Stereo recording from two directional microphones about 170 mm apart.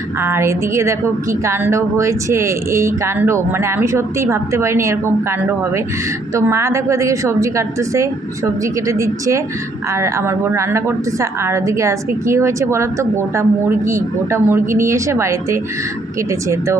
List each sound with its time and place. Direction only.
0.2 s a woman's voice: 15° right (ahead or behind)